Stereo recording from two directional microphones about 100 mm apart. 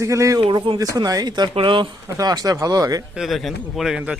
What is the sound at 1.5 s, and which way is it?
Speech, 60° right (ahead or behind).